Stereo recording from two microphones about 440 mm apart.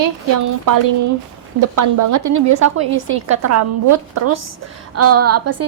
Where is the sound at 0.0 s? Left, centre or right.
Right.